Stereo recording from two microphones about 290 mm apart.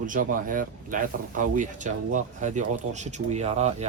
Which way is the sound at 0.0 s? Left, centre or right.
Right.